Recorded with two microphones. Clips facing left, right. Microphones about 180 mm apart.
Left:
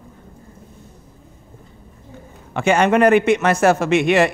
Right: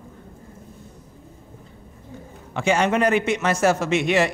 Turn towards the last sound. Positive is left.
turn(degrees=60)  # may be behind; listen again after turning